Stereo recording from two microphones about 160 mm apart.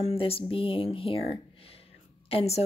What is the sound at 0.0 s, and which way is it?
Speech, 40° left (ahead or behind).